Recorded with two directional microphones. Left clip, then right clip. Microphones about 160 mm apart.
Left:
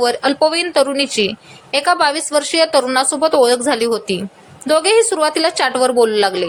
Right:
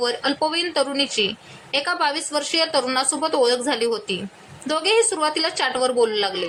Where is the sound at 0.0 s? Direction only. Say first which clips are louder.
Left 8 dB; 25° left (ahead or behind).